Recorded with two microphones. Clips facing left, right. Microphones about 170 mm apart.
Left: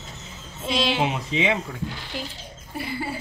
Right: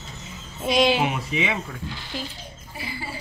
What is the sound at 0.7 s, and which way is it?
Speech, 15° right (ahead or behind).